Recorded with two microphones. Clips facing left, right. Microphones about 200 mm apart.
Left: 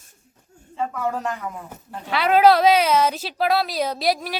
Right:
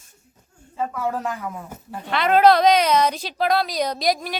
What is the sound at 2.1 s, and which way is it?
A woman's voice, 5° left (ahead or behind).